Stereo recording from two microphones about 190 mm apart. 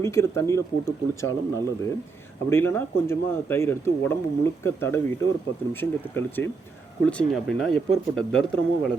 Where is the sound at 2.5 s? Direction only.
10° left (ahead or behind).